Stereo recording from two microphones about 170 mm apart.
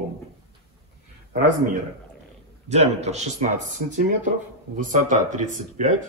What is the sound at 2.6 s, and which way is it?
Speech, 40° right (ahead or behind).